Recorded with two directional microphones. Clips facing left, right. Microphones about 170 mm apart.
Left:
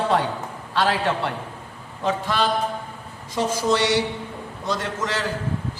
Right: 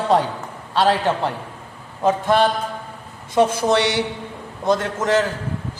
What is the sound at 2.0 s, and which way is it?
Speech, 50° right (ahead or behind).